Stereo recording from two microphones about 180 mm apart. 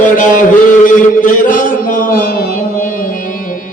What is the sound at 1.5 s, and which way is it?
Music, 50° left (ahead or behind).